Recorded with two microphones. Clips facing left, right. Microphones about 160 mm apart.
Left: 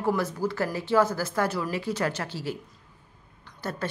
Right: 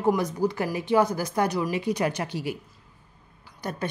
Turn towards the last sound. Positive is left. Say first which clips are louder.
# right 1 dB
turn(degrees=-15)  # may be behind; listen again after turning